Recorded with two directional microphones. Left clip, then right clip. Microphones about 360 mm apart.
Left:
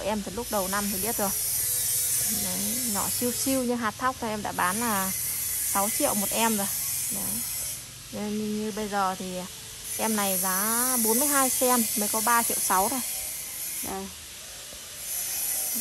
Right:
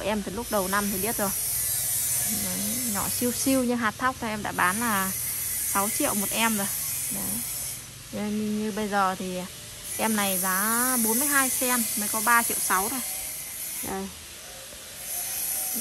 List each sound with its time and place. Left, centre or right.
0.0 s speech: centre
2.9 s speech: centre
8.2 s speech: centre